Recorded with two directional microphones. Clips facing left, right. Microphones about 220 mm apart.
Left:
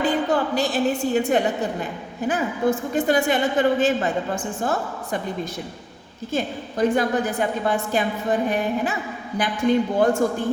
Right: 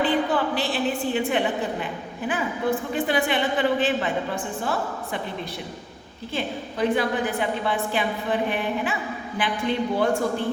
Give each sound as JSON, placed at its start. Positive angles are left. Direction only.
{"t": 0.0, "sound": "a woman's voice", "side_deg": 45}
{"t": 6.3, "sound": "a woman's voice", "side_deg": 45}